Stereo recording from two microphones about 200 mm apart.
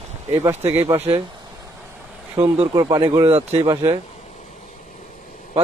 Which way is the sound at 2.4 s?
25° right (ahead or behind).